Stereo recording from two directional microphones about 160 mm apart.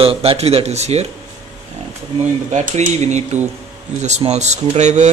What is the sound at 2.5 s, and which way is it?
Speech, 45° right (ahead or behind).